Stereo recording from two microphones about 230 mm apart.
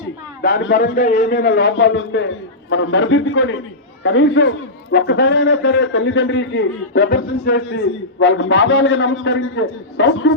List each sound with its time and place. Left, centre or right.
0.4 s a man's voice: left